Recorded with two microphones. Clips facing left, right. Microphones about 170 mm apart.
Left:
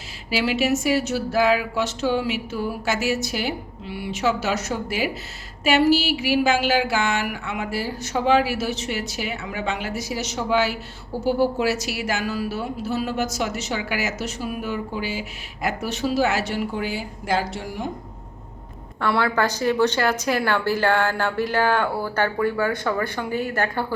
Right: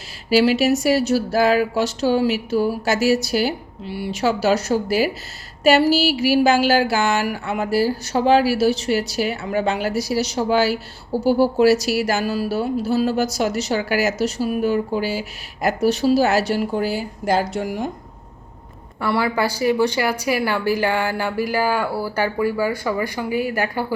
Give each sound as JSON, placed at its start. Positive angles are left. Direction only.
{"t": 0.3, "sound": "speech", "side_deg": -40}
{"t": 18.9, "sound": "a woman's voice", "side_deg": -5}